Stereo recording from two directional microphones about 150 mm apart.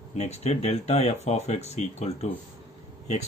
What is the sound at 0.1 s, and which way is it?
Speech, 45° left (ahead or behind).